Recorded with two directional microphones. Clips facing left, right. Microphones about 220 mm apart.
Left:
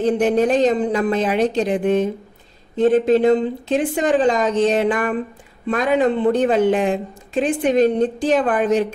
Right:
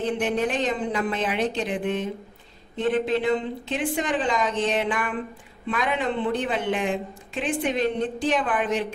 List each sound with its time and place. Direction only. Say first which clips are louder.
0.0 s speech: left 8 dB; 40° left (ahead or behind)